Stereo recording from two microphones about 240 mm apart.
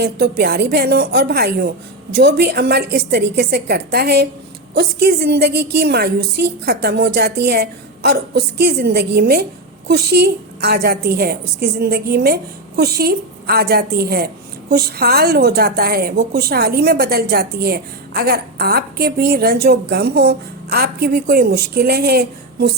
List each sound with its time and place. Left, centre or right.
0.0 s a woman's voice: right